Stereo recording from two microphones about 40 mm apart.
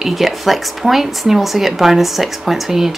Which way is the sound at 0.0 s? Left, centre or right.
Centre.